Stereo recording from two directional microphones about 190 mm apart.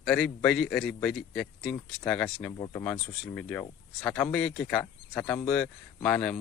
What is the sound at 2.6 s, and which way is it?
Speech, 15° left (ahead or behind).